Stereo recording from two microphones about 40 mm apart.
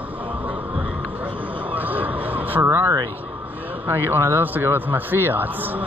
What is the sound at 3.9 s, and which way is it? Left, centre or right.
A man's voice, right.